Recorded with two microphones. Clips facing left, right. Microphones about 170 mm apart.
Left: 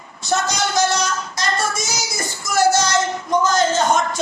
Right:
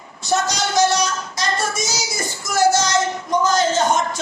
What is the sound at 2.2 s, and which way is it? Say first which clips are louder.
Music: even; 15° right (ahead or behind).